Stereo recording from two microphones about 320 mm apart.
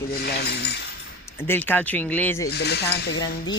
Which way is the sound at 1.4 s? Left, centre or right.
Centre.